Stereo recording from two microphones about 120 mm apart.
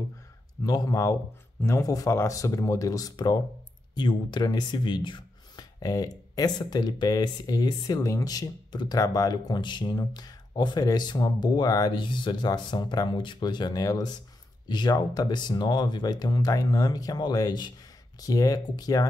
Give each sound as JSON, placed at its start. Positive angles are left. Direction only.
{"t": 0.7, "sound": "speech", "side_deg": 30}